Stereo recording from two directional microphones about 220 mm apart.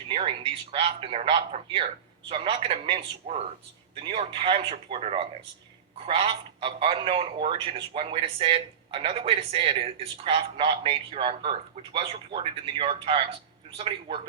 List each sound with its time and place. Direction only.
0.1 s speech: 25° right (ahead or behind)